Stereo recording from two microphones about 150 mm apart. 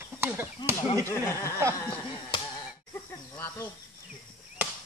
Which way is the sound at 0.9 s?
20° left (ahead or behind).